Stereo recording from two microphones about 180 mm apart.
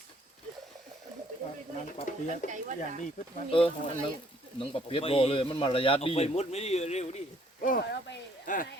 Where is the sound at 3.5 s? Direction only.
30° left (ahead or behind).